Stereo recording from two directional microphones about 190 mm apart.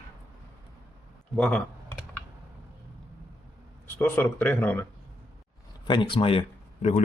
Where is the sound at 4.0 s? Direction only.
10° left (ahead or behind).